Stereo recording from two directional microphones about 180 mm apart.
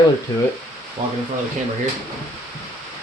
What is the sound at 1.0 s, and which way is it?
Speech, 45° right (ahead or behind).